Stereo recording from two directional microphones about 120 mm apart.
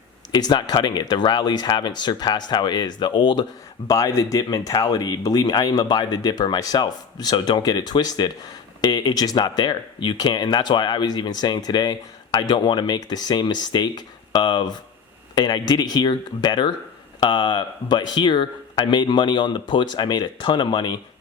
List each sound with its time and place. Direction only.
0.3 s speech: 35° left (ahead or behind)
3.8 s speech: 30° left (ahead or behind)